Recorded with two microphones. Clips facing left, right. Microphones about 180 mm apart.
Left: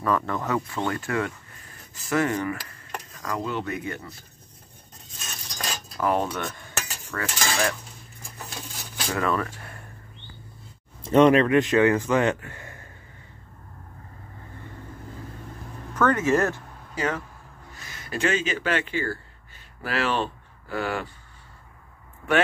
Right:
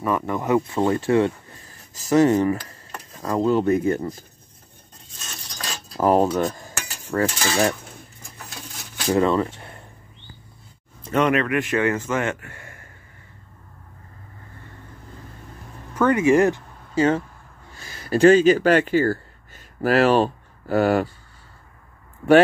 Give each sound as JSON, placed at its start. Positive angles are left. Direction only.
{"t": 0.0, "sound": "speech", "side_deg": -15}
{"t": 5.9, "sound": "cutlery", "side_deg": -35}
{"t": 9.0, "sound": "a sound", "side_deg": -25}
{"t": 11.1, "sound": "a man's voice", "side_deg": 30}
{"t": 15.9, "sound": "speech", "side_deg": -10}
{"t": 16.9, "sound": "speech", "side_deg": -30}